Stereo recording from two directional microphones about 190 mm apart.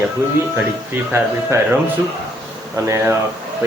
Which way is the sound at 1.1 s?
10° right (ahead or behind).